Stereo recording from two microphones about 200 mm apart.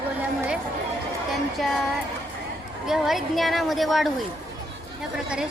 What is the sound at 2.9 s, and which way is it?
A woman's voice, centre (ahead or behind).